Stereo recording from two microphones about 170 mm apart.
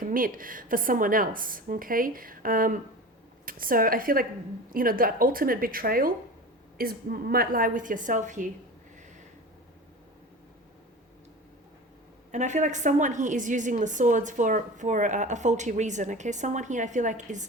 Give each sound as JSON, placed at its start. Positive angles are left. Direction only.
{"t": 0.0, "sound": "a woman's voice", "side_deg": -55}
{"t": 12.3, "sound": "a woman's voice", "side_deg": -45}